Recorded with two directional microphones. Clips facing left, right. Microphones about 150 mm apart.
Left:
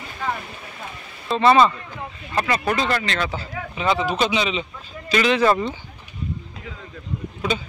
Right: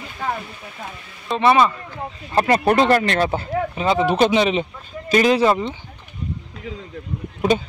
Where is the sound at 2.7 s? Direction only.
55° right (ahead or behind).